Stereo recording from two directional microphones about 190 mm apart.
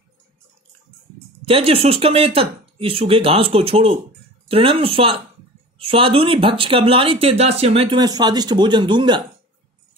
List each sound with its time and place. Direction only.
1.4 s speech: 30° right (ahead or behind)